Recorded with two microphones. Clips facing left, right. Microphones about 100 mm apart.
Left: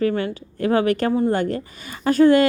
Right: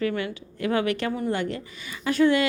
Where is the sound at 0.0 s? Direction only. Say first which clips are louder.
Left 6 dB; 35° left (ahead or behind).